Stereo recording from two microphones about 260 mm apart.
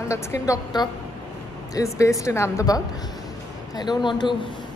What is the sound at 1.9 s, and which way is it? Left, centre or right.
A woman's voice, centre.